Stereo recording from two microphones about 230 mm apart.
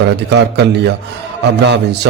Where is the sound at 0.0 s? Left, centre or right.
Right.